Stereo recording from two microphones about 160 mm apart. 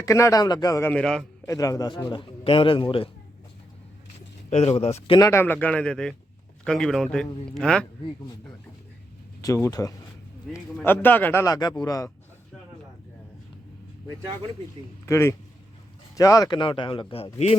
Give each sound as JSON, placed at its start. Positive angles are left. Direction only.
{"t": 0.0, "sound": "a man's voice", "side_deg": 20}
{"t": 1.5, "sound": "a man's voice", "side_deg": 20}
{"t": 4.4, "sound": "speech", "side_deg": 40}
{"t": 5.2, "sound": "a man's voice", "side_deg": 15}
{"t": 9.4, "sound": "a man's voice", "side_deg": 20}
{"t": 11.4, "sound": "a man's voice", "side_deg": 25}
{"t": 15.0, "sound": "a man's voice", "side_deg": 15}